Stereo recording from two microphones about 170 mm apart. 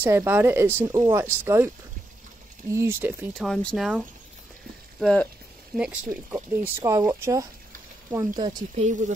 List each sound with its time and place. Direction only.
0.0 s speech: 15° right (ahead or behind)
2.7 s speech: 15° right (ahead or behind)
3.3 s speech: centre (ahead or behind)
5.0 s speech: 5° left (ahead or behind)
5.8 s speech: 10° right (ahead or behind); by 8.6 s 25° right (ahead or behind)
8.7 s speech: 40° right (ahead or behind)